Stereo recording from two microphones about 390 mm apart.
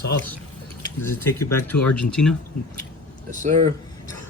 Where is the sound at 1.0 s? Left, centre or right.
Centre.